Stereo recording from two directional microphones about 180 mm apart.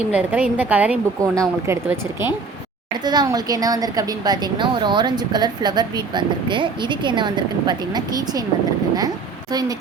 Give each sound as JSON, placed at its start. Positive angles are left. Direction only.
{"t": 0.1, "sound": "a woman's voice", "side_deg": -10}